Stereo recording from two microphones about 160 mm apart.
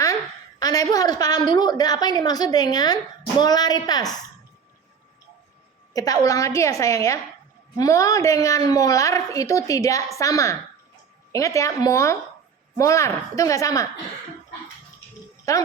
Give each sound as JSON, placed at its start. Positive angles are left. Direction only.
{"t": 0.6, "sound": "a woman's voice", "side_deg": 20}
{"t": 5.9, "sound": "a woman's voice", "side_deg": 20}
{"t": 15.5, "sound": "a woman's voice", "side_deg": 20}